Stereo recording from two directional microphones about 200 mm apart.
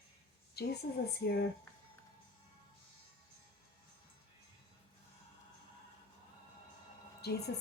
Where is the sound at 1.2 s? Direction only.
55° left (ahead or behind).